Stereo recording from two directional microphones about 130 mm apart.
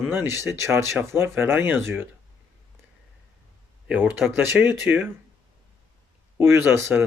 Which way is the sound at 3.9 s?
15° right (ahead or behind).